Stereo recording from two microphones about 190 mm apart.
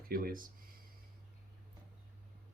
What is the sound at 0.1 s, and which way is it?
Speech, 50° right (ahead or behind).